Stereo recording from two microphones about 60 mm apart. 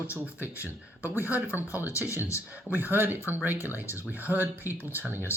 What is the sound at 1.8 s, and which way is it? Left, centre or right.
Speech, left.